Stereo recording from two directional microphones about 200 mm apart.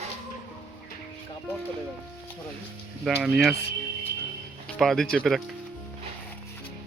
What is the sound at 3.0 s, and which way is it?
Speech, centre (ahead or behind).